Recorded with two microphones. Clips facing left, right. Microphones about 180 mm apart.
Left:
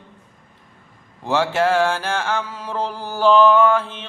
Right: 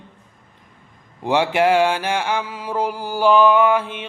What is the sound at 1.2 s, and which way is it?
Mantra, 15° right (ahead or behind).